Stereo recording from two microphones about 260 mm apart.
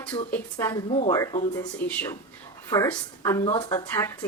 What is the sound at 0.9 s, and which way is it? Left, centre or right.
Speech, left.